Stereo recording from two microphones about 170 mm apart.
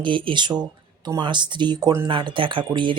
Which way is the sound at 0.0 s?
30° right (ahead or behind).